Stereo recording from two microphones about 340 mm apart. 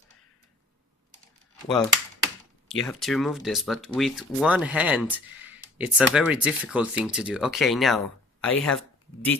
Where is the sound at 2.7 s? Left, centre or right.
Centre.